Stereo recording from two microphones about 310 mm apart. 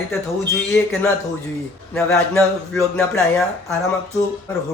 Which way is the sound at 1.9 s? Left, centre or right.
Centre.